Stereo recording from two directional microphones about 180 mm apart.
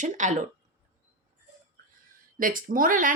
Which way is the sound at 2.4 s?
50° right (ahead or behind).